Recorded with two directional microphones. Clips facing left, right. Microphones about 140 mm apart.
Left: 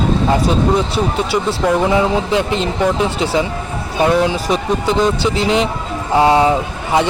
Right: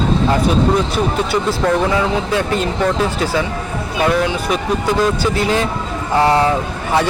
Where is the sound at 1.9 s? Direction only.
20° left (ahead or behind).